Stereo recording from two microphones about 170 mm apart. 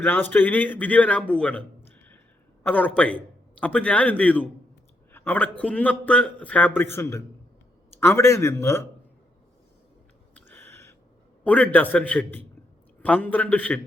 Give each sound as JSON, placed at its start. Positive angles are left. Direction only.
{"t": 0.0, "sound": "a man's voice", "side_deg": 10}
{"t": 2.6, "sound": "a man's voice", "side_deg": 10}
{"t": 10.3, "sound": "a sound", "side_deg": 10}
{"t": 11.4, "sound": "a man's voice", "side_deg": 10}